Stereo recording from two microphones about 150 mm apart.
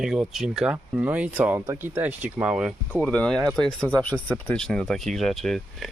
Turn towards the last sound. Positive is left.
turn(degrees=0)  # may be behind; listen again after turning